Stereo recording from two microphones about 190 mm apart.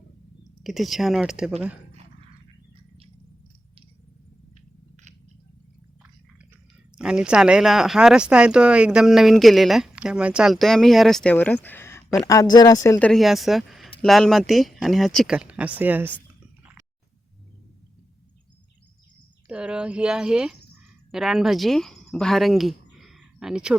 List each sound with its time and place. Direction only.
0.6 s speech: centre (ahead or behind)
6.9 s speech: 5° right (ahead or behind); by 13.1 s 15° left (ahead or behind)
13.1 s speech: centre (ahead or behind)
19.5 s speech: 5° right (ahead or behind)